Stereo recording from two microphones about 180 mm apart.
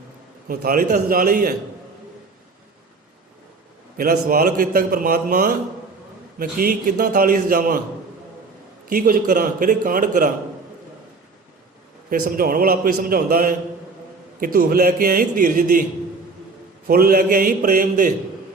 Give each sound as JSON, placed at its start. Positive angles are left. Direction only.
{"t": 0.4, "sound": "a man's voice", "side_deg": -55}
{"t": 3.9, "sound": "a man's voice", "side_deg": -55}
{"t": 8.9, "sound": "a man's voice", "side_deg": -50}
{"t": 12.4, "sound": "a man's voice", "side_deg": -55}
{"t": 16.8, "sound": "a man's voice", "side_deg": -55}